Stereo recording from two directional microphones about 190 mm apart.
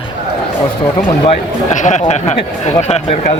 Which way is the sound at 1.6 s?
40° left (ahead or behind).